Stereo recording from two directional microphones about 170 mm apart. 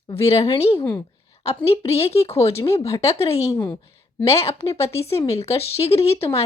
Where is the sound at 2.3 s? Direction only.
15° left (ahead or behind).